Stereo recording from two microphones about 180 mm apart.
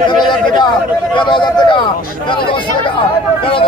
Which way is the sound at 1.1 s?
25° left (ahead or behind).